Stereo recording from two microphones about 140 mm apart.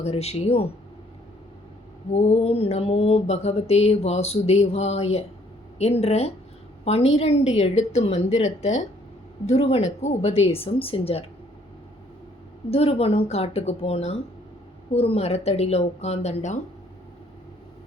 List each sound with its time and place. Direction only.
0.0 s mantra: 50° left (ahead or behind)
2.1 s mantra: 50° left (ahead or behind)
12.7 s mantra: 45° left (ahead or behind)